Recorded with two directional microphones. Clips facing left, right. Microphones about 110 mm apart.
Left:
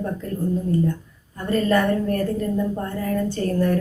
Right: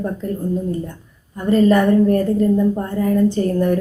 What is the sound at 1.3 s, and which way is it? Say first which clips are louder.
Speech: right 6 dB; 20° right (ahead or behind).